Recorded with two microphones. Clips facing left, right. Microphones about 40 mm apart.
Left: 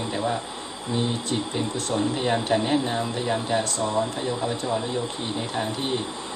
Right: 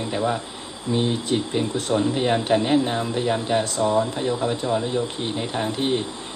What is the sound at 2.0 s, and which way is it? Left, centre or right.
Speech, centre.